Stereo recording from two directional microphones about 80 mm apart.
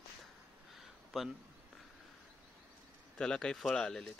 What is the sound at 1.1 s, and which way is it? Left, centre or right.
Speech, centre.